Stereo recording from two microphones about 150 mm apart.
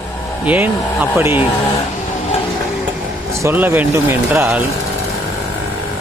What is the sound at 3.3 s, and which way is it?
Speech, 15° right (ahead or behind).